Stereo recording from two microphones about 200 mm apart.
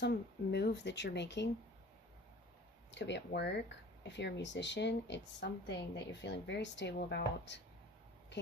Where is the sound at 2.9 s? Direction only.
60° left (ahead or behind).